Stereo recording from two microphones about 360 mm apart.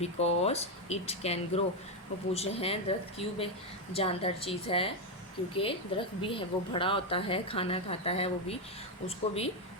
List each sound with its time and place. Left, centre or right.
0.0 s a woman's voice: centre